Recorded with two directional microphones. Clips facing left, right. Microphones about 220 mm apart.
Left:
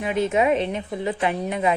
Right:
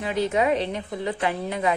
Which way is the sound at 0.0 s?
20° left (ahead or behind).